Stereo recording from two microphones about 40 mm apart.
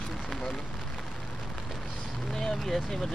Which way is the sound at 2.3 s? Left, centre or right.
Centre.